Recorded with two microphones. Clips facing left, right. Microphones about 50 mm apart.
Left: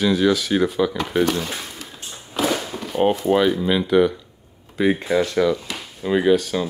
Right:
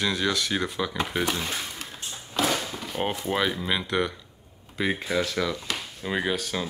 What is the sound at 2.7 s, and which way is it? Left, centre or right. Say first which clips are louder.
Speech: left 9 dB; centre.